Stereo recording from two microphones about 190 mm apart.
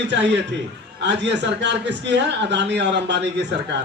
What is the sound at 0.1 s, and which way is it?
A man's voice, 65° right (ahead or behind).